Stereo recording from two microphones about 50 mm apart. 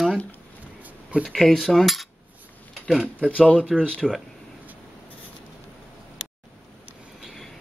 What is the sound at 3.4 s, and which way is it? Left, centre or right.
Speech, left.